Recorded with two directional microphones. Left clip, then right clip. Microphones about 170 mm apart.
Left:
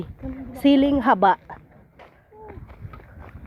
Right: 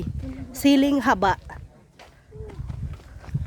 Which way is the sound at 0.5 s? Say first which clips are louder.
Left 1 dB; 20° right (ahead or behind).